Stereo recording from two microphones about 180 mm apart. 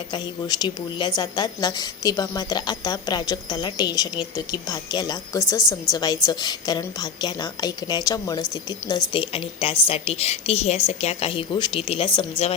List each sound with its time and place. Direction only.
0.1 s a woman's voice: 25° left (ahead or behind)